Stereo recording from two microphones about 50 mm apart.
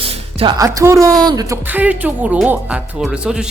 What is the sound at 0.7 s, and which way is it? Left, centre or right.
Speech, right.